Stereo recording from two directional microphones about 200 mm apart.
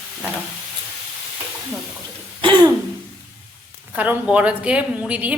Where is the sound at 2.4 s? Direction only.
25° right (ahead or behind).